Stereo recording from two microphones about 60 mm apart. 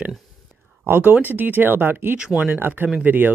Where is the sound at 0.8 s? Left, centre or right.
Right.